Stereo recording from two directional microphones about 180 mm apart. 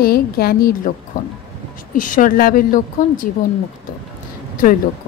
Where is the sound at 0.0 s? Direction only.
60° left (ahead or behind).